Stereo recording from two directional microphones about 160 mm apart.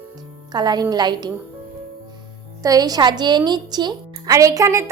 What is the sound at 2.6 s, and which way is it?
A woman's voice, 25° right (ahead or behind).